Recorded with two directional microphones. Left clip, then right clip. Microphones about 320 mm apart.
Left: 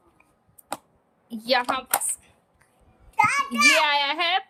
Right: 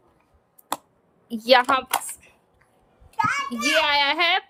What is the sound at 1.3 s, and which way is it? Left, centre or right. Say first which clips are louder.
Speech: right 6 dB; centre.